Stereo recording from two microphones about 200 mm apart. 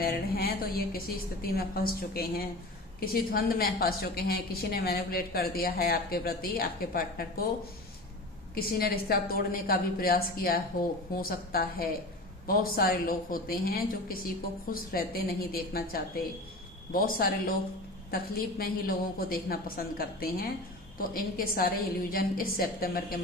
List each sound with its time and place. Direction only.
0.0 s a woman's voice: 50° left (ahead or behind)
8.5 s a woman's voice: 50° left (ahead or behind)